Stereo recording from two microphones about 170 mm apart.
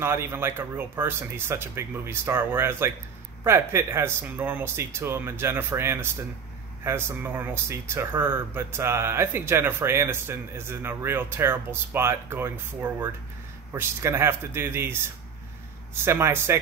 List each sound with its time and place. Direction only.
0.0 s speech: 15° right (ahead or behind)